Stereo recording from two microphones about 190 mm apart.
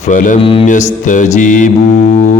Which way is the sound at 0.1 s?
45° left (ahead or behind).